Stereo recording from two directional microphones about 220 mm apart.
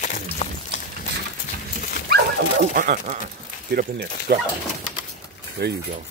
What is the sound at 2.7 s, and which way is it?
Speech, 40° right (ahead or behind).